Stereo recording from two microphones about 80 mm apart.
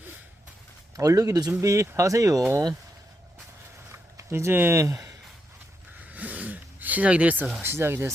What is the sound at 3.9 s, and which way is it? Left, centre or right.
Speech, right.